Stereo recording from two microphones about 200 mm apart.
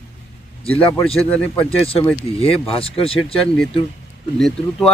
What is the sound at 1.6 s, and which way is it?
Speech, 30° left (ahead or behind).